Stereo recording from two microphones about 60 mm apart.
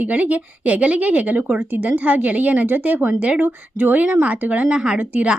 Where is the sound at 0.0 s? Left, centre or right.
Right.